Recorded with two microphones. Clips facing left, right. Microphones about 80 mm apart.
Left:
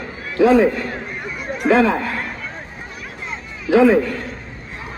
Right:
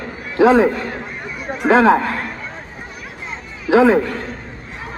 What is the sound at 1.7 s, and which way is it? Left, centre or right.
Speech, right.